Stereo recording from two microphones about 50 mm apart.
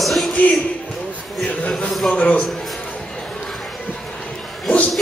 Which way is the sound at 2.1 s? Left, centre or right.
Left.